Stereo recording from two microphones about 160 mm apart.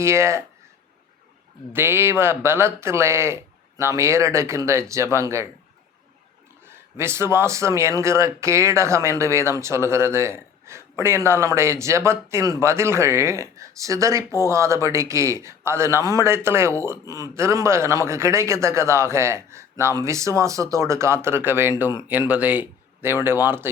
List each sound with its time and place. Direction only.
0.0 s speech: 15° right (ahead or behind)
1.7 s speech: 15° right (ahead or behind)
6.7 s speech: 15° right (ahead or behind)